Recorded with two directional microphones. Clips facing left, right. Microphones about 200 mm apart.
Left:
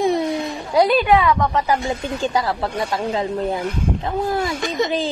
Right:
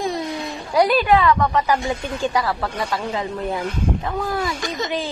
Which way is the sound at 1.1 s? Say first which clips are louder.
Even; centre (ahead or behind).